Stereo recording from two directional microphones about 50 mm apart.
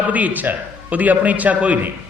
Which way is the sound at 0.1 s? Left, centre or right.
Right.